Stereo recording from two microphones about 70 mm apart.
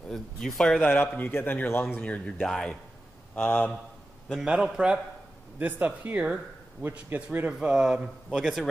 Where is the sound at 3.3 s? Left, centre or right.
Left.